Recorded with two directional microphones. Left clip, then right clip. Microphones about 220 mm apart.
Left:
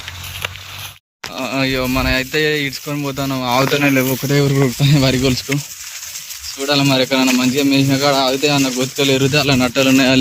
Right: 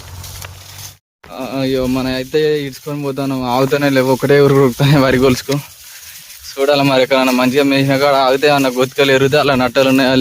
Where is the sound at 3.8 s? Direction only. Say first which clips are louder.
Right 3 dB; 15° right (ahead or behind).